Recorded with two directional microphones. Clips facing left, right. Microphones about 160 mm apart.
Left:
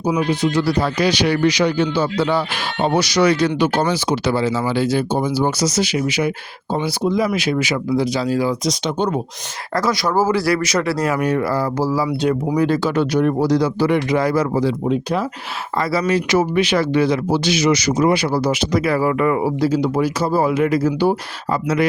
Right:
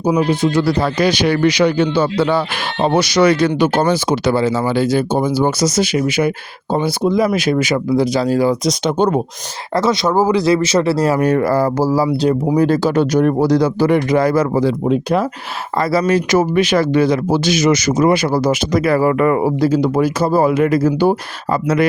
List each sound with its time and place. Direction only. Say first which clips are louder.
0.8 s speech: right 2 dB; 50° right (ahead or behind)
9.7 s speech: right 3 dB; 25° right (ahead or behind)
11.3 s speech: right 5 dB; 45° right (ahead or behind)
12.0 s speech: right 4 dB; 25° right (ahead or behind)
12.5 s speech: right 4 dB; 40° right (ahead or behind); by 15.3 s 55° right (ahead or behind)
15.8 s speech: right 4 dB; 45° right (ahead or behind)